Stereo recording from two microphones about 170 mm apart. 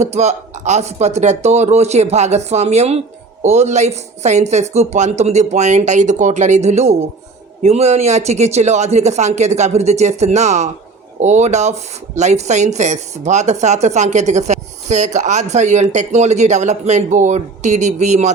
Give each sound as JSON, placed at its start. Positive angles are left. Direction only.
{"t": 0.0, "sound": "a woman's voice", "side_deg": -40}